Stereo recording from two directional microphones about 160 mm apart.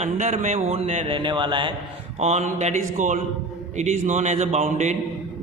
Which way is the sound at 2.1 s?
45° right (ahead or behind).